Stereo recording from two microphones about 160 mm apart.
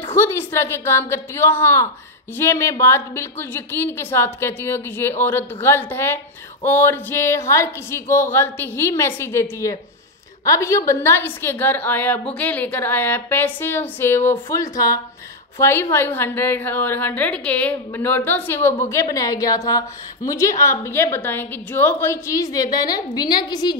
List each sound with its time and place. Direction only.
0.0 s a woman's voice: 15° left (ahead or behind)